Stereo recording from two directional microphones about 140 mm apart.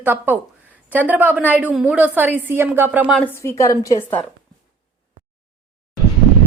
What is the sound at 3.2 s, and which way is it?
Speech, 15° left (ahead or behind).